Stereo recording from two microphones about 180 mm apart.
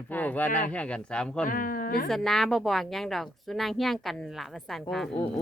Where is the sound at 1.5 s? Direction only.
50° left (ahead or behind).